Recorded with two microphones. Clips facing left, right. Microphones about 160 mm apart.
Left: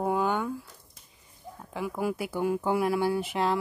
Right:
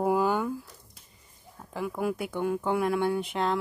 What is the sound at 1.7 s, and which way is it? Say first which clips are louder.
Speech: even; centre (ahead or behind).